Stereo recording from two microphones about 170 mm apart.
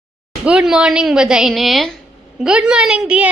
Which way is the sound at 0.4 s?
5° right (ahead or behind).